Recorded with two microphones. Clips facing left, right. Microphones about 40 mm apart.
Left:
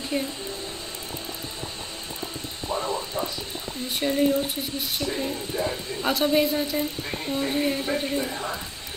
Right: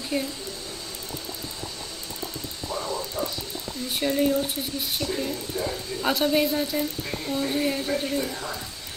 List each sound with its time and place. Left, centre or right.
0.1 s speech: left
2.2 s music: left
4.0 s a woman's voice: centre
5.1 s speech: centre
6.0 s a woman's voice: centre
7.3 s speech: left
7.5 s a woman's voice: centre
7.8 s speech: left